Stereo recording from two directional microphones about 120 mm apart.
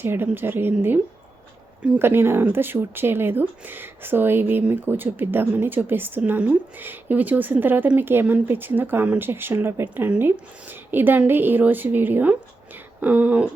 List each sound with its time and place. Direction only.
0.0 s speech: 15° right (ahead or behind)